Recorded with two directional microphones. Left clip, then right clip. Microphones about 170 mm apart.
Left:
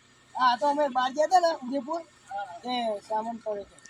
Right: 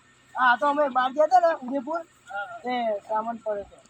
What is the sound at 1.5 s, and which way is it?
Speech, 20° right (ahead or behind).